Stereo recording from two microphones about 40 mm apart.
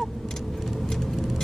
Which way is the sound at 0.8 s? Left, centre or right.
Centre.